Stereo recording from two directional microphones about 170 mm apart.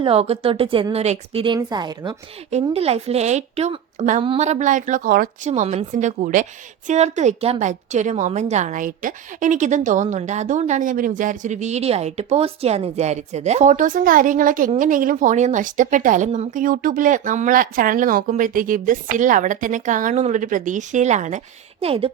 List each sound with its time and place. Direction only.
0.0 s a woman's voice: 35° right (ahead or behind)
2.7 s a woman's voice: 35° right (ahead or behind); by 5.5 s 60° right (ahead or behind)
5.5 s a woman's voice: 40° right (ahead or behind)